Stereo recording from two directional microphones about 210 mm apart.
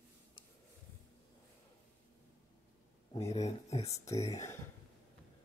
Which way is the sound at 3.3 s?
30° left (ahead or behind).